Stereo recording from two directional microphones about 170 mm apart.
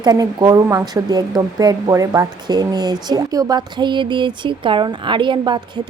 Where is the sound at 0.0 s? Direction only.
25° right (ahead or behind).